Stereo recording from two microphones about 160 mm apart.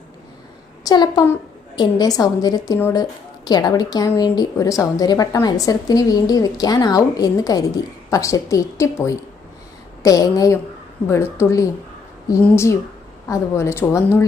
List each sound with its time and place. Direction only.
0.9 s a woman's voice: 25° left (ahead or behind)